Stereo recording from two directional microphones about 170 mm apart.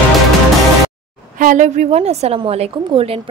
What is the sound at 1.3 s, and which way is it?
Speech, 50° right (ahead or behind).